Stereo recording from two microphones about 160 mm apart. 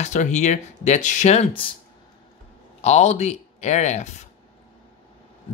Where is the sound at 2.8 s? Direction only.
45° left (ahead or behind).